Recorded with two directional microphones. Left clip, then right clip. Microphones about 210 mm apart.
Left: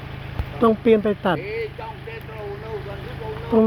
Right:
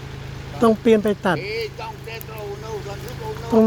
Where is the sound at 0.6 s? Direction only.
10° right (ahead or behind).